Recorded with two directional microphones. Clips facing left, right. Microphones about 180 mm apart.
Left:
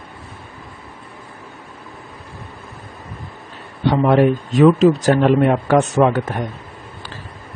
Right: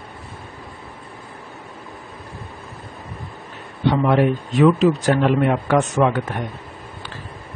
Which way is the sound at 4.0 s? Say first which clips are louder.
Left 5 dB; 40° left (ahead or behind).